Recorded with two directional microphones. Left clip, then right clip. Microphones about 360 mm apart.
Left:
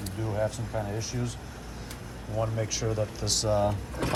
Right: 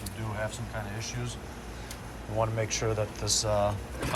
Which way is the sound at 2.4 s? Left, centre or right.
Centre.